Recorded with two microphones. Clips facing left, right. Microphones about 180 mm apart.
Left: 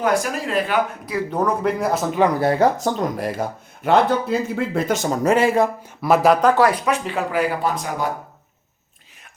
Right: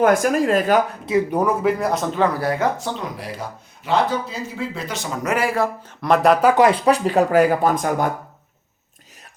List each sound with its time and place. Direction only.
0.0 s speech: 50° right (ahead or behind)
1.3 s speech: 10° right (ahead or behind); by 2.6 s 25° left (ahead or behind)
2.7 s speech: 45° left (ahead or behind); by 5.9 s 20° left (ahead or behind)
6.0 s speech: 5° left (ahead or behind)
6.6 s speech: 25° right (ahead or behind); by 8.1 s 50° right (ahead or behind)